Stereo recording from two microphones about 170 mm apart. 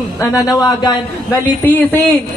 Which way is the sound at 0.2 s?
20° left (ahead or behind).